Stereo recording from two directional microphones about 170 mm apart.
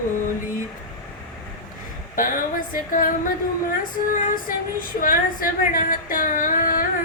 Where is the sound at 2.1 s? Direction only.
50° left (ahead or behind).